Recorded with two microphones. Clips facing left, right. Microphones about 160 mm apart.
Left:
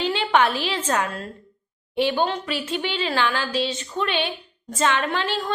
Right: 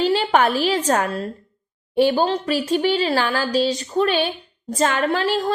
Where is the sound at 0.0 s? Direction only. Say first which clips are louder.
Right 3 dB; 40° right (ahead or behind).